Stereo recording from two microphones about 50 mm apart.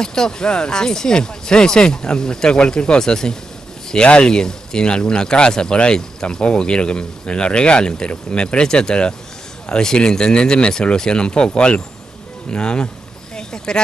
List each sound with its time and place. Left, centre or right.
0.0 s speech: centre